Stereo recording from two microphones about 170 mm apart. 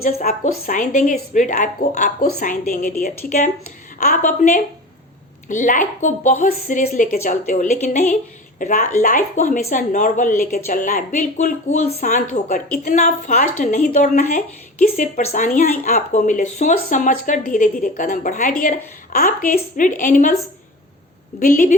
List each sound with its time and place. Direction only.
0.0 s speech: 40° left (ahead or behind)
21.3 s speech: 50° left (ahead or behind)